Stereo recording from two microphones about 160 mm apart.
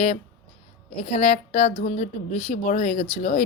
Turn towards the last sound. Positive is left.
turn(degrees=45)  # may be behind; listen again after turning